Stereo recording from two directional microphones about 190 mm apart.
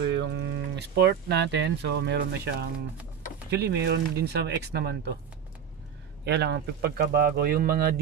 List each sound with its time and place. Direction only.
0.1 s speech: 65° right (ahead or behind)
6.2 s speech: 60° right (ahead or behind)